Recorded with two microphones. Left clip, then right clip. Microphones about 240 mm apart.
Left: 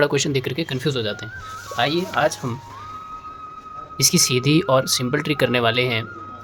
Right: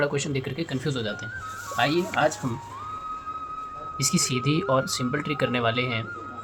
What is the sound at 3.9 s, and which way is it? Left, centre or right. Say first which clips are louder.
Speech: left 8 dB; left.